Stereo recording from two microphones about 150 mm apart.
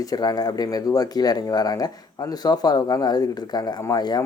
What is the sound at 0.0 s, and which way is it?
Speech, 25° left (ahead or behind).